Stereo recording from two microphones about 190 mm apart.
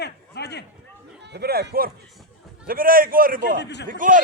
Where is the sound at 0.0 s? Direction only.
60° left (ahead or behind).